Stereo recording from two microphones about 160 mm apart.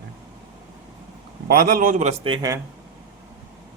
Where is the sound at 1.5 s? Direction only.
65° right (ahead or behind); by 2.3 s 45° right (ahead or behind).